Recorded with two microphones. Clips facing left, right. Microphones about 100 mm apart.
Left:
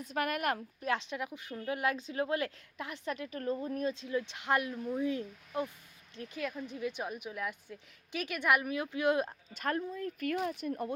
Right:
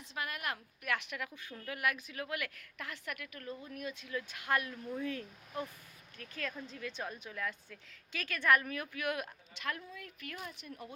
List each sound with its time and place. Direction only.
0.0 s speech: 50° left (ahead or behind)
0.8 s a woman's voice: 25° left (ahead or behind)
9.6 s speech: 40° left (ahead or behind)